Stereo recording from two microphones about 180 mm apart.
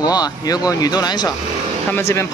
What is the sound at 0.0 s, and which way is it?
Speech, 20° left (ahead or behind).